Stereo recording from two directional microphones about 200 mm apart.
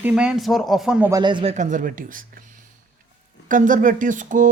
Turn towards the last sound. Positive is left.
turn(degrees=-40)  # may be behind; listen again after turning